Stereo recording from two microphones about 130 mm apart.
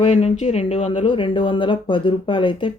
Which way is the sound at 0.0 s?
55° left (ahead or behind).